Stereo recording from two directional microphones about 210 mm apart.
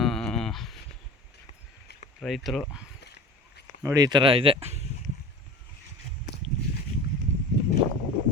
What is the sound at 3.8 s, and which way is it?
Speech, 15° right (ahead or behind).